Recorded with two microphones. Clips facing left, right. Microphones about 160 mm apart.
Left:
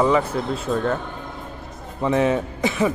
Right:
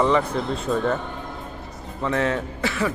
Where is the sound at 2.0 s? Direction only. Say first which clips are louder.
Left 4 dB; 15° left (ahead or behind).